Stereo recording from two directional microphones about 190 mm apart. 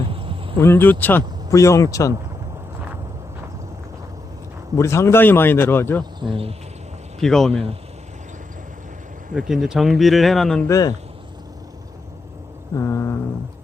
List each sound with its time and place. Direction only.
0.1 s a sound: 30° right (ahead or behind)
0.6 s speech: 10° left (ahead or behind)
4.8 s speech: 15° left (ahead or behind)
6.0 s speech: 25° right (ahead or behind)
7.2 s speech: centre (ahead or behind)
9.5 s speech: centre (ahead or behind)
10.7 s speech: 20° left (ahead or behind)
12.7 s speech: 15° left (ahead or behind)